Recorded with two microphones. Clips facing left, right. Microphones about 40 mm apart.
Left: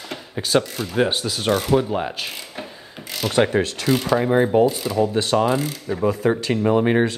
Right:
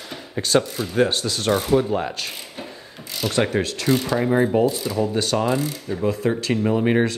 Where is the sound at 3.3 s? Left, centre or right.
Centre.